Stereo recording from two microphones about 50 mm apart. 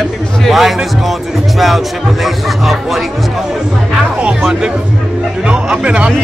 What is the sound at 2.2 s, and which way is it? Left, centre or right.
Speech, centre.